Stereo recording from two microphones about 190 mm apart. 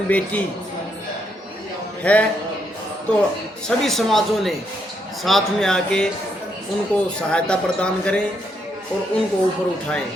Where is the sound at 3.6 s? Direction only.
Centre (ahead or behind).